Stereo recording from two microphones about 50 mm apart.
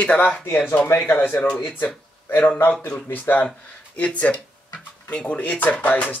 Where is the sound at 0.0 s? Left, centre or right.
Left.